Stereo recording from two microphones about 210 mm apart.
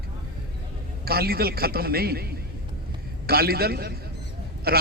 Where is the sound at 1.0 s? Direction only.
45° right (ahead or behind).